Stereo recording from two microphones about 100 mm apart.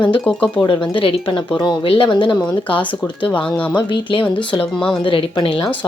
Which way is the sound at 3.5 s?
15° left (ahead or behind).